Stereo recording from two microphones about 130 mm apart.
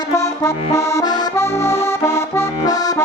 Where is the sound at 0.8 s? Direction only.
25° left (ahead or behind).